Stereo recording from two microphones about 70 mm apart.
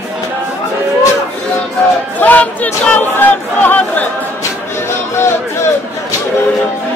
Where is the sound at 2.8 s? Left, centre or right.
Left.